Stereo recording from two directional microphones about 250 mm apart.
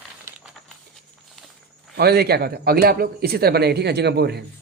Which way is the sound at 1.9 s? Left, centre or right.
Right.